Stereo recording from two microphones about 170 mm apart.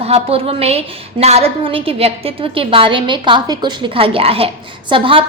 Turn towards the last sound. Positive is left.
turn(degrees=-30)  # may be behind; listen again after turning